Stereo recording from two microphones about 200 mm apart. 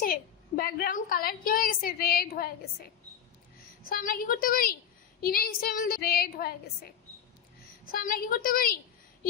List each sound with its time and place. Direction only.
0.0 s a woman's voice: 45° left (ahead or behind)